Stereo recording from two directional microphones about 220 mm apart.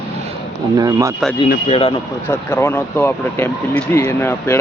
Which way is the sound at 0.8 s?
15° right (ahead or behind).